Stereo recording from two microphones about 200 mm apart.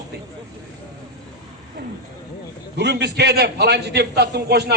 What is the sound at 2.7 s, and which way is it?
A man's voice, 55° right (ahead or behind).